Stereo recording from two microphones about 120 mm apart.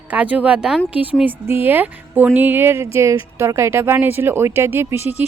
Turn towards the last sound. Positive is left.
turn(degrees=-20)  # may be behind; listen again after turning